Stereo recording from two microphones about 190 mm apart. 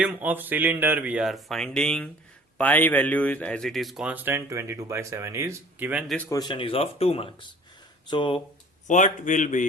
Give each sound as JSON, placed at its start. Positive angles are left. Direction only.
{"t": 0.0, "sound": "speech", "side_deg": -10}
{"t": 6.1, "sound": "speech", "side_deg": 15}
{"t": 8.9, "sound": "a man's voice", "side_deg": 40}